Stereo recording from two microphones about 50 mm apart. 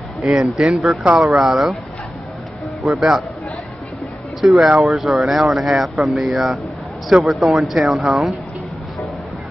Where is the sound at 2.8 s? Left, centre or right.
Centre.